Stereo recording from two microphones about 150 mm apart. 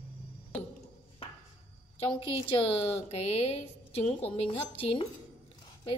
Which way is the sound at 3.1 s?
45° left (ahead or behind).